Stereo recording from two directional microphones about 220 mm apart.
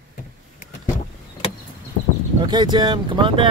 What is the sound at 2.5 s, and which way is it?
Speech, 20° right (ahead or behind).